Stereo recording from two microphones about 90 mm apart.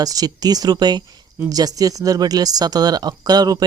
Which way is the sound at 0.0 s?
45° right (ahead or behind).